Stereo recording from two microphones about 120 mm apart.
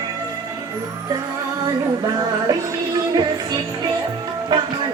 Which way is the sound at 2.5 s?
30° right (ahead or behind).